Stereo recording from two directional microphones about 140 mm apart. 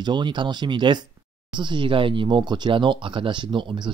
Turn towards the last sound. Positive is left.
turn(degrees=-35)  # may be behind; listen again after turning